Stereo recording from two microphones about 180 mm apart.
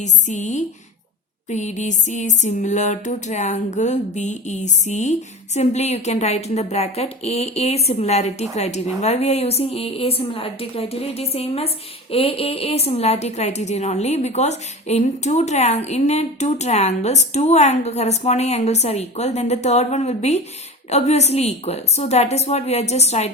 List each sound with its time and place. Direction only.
0.0 s a woman's voice: 40° left (ahead or behind)